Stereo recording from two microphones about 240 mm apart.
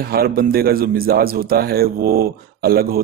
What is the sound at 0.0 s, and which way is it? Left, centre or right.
A man's voice, right.